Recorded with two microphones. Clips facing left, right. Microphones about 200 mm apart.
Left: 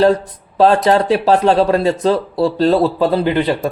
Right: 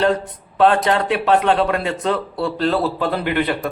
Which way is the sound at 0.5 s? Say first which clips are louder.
Left 4 dB; 35° left (ahead or behind).